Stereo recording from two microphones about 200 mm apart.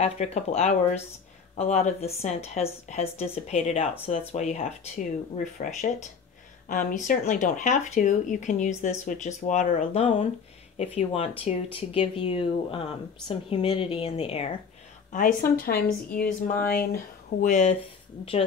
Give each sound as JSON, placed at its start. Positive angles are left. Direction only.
{"t": 0.0, "sound": "a woman's voice", "side_deg": 35}
{"t": 15.1, "sound": "a woman's voice", "side_deg": 45}
{"t": 17.4, "sound": "a woman's voice", "side_deg": 40}